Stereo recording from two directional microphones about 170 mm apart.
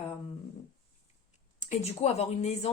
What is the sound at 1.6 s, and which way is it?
Speech, 40° left (ahead or behind).